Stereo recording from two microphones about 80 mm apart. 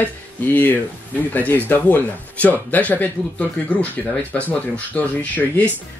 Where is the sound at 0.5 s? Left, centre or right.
Left.